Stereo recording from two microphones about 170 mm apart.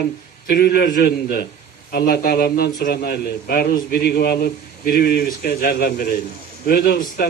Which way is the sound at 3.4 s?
55° left (ahead or behind).